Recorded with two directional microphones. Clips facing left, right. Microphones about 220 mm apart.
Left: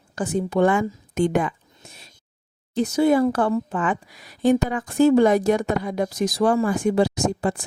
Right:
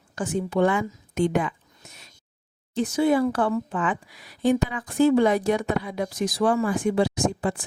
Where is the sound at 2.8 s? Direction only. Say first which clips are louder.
Left 3 dB; 40° left (ahead or behind).